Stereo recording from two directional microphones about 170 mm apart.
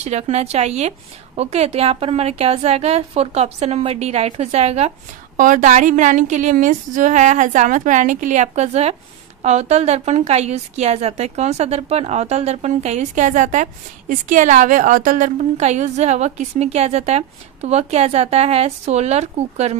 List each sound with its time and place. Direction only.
0.0 s a woman's voice: 40° right (ahead or behind)